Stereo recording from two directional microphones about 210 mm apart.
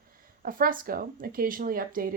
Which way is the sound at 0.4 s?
40° right (ahead or behind).